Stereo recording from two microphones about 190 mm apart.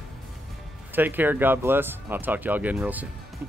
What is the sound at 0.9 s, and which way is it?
Speech, 10° right (ahead or behind).